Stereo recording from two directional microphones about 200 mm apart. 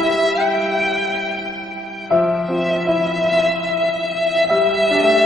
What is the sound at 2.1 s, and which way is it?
Music, centre (ahead or behind).